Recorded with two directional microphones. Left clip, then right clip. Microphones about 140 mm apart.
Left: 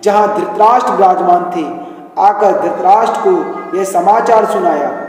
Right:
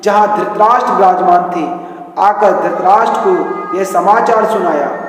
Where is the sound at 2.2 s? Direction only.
40° left (ahead or behind).